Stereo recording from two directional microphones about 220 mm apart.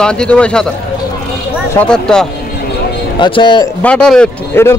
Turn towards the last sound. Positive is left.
turn(degrees=10)  # may be behind; listen again after turning